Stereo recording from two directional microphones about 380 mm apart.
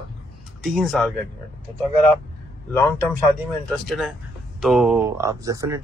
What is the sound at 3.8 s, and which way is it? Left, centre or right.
Speech, centre.